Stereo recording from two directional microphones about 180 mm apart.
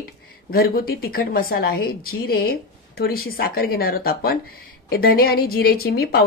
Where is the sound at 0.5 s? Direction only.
55° left (ahead or behind).